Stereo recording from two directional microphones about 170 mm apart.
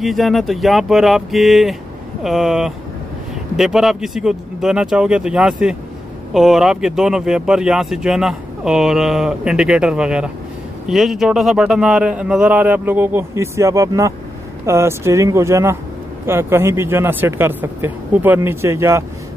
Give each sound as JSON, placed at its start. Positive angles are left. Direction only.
{"t": 0.0, "sound": "a man's voice", "side_deg": 0}